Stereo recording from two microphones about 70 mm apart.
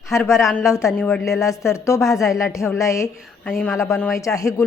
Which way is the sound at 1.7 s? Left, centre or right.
Left.